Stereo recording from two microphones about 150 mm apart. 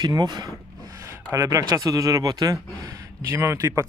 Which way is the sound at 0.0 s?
30° right (ahead or behind).